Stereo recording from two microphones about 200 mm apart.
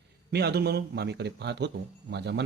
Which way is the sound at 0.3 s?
55° right (ahead or behind).